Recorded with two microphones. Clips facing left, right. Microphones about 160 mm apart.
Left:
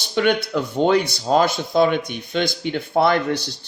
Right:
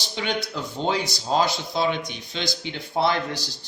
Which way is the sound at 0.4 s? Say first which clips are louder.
Left 8 dB; 60° left (ahead or behind).